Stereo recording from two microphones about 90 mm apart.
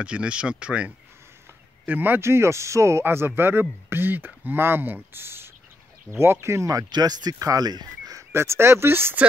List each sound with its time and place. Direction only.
0.0 s speech: 10° right (ahead or behind); by 6.9 s 35° right (ahead or behind)
6.9 s speech: 50° right (ahead or behind); by 9.2 s 25° right (ahead or behind)